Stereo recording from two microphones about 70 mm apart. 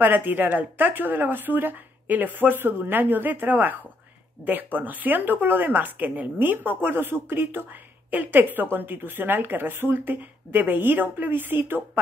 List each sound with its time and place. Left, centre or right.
0.0 s speech: right
4.7 s speech: right